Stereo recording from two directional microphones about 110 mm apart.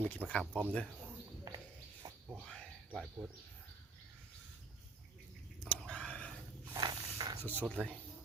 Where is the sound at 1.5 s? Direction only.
35° right (ahead or behind).